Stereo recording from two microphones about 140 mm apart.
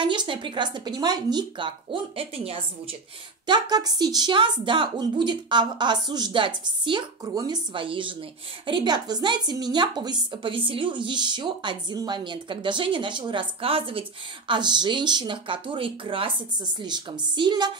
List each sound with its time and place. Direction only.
0.0 s a woman's voice: 35° right (ahead or behind)
3.4 s a woman's voice: 30° right (ahead or behind)